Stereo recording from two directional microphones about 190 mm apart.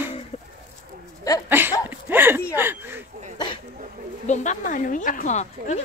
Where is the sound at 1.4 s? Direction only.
10° right (ahead or behind).